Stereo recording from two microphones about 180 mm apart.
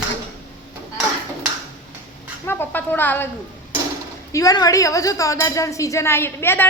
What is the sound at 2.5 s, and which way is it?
Speech, 10° left (ahead or behind).